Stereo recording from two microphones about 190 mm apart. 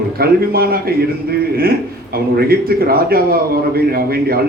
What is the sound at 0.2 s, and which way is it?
Speech, 55° right (ahead or behind).